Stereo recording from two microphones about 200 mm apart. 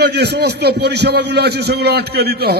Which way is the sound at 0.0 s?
55° right (ahead or behind).